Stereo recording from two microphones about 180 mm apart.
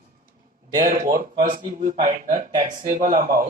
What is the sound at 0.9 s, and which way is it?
Speech, 45° right (ahead or behind).